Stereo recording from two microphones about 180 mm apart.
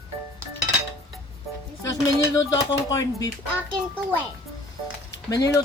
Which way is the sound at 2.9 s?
20° left (ahead or behind).